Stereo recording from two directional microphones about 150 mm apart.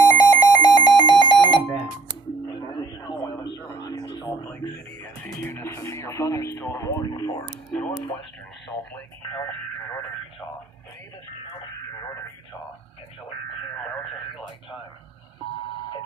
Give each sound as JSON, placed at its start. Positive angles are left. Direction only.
{"t": 0.1, "sound": "alarm clock", "side_deg": 25}
{"t": 3.0, "sound": "a sound", "side_deg": 30}
{"t": 5.0, "sound": "music", "side_deg": 15}
{"t": 7.7, "sound": "radio", "side_deg": 10}
{"t": 8.7, "sound": "radio", "side_deg": 25}